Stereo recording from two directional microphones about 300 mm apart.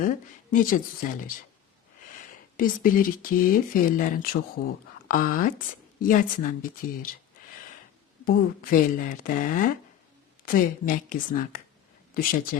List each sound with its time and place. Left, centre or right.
0.0 s speech: left
2.6 s speech: left
8.2 s speech: left